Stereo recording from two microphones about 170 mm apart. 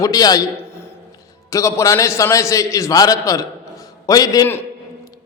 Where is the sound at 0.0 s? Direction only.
20° left (ahead or behind).